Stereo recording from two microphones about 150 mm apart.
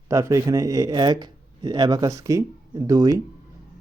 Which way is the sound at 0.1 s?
20° right (ahead or behind).